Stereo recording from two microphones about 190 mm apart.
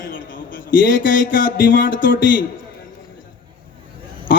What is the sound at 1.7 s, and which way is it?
Speech, 45° left (ahead or behind).